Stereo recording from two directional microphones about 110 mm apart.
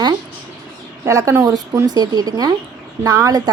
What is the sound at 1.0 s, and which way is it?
A woman's voice, 25° right (ahead or behind).